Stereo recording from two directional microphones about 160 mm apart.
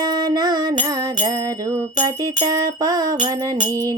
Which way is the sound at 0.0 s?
25° right (ahead or behind).